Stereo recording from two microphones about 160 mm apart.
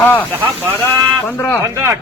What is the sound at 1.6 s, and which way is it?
Speech, 20° right (ahead or behind).